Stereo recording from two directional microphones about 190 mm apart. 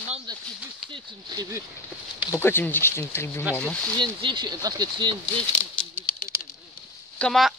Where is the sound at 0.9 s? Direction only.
20° right (ahead or behind).